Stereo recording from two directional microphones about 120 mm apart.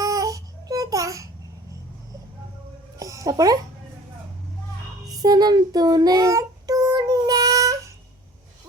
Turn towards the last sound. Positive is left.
turn(degrees=-30)  # may be behind; listen again after turning